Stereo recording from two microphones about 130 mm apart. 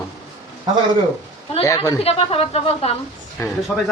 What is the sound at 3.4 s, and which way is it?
Speech, 25° left (ahead or behind).